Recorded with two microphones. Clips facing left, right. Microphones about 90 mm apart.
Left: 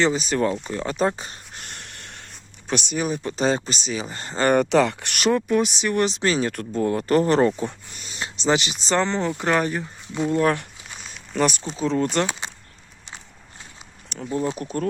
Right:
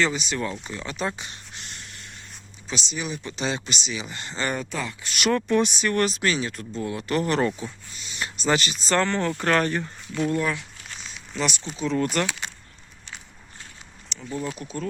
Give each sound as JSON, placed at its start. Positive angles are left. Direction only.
{"t": 0.0, "sound": "speech", "side_deg": 35}
{"t": 0.7, "sound": "a sound", "side_deg": 40}
{"t": 2.6, "sound": "speech", "side_deg": 55}
{"t": 4.5, "sound": "speech", "side_deg": 70}
{"t": 5.3, "sound": "speech", "side_deg": 10}
{"t": 6.5, "sound": "speech", "side_deg": 50}
{"t": 8.2, "sound": "speech", "side_deg": 20}
{"t": 10.2, "sound": "speech", "side_deg": 25}
{"t": 10.4, "sound": "speech", "side_deg": 55}
{"t": 11.6, "sound": "speech", "side_deg": 30}
{"t": 14.1, "sound": "a sound", "side_deg": 45}
{"t": 14.6, "sound": "speech", "side_deg": 55}